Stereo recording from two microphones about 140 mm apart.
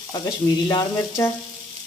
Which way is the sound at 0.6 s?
30° left (ahead or behind).